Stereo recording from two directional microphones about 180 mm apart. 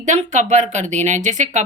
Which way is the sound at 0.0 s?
40° right (ahead or behind).